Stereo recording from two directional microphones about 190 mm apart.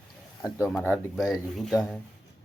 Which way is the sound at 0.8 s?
10° left (ahead or behind).